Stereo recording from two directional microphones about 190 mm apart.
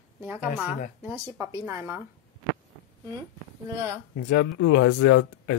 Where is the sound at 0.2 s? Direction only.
5° right (ahead or behind).